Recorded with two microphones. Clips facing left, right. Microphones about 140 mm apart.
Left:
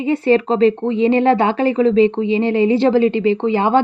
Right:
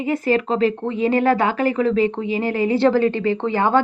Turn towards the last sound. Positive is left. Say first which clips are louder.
# left 3 dB
turn(degrees=20)  # may be behind; listen again after turning